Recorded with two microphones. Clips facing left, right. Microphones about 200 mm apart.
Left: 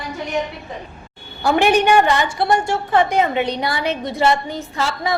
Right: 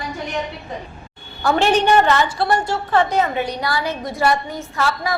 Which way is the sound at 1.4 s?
15° left (ahead or behind).